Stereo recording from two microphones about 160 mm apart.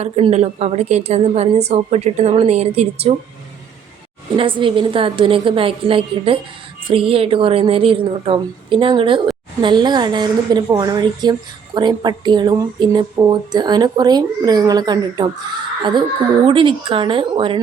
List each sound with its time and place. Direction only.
0.0 s a woman's voice: 40° right (ahead or behind)
4.4 s a woman's voice: 30° right (ahead or behind)